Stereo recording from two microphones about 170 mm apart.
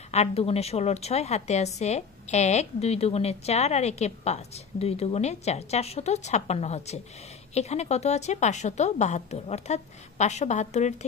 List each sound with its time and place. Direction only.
0.1 s a woman's voice: 35° left (ahead or behind)